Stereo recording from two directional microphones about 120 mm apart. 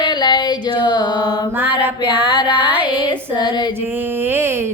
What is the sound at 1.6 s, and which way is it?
Music, 15° right (ahead or behind).